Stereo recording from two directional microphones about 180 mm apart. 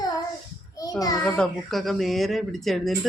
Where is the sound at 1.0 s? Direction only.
20° left (ahead or behind).